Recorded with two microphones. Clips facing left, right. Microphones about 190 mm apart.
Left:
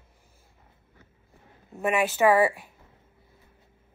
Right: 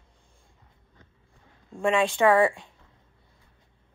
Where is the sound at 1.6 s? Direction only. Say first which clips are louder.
Right 2 dB; 20° left (ahead or behind).